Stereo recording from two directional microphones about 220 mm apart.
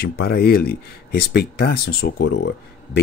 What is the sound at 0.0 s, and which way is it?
Speech, 45° left (ahead or behind).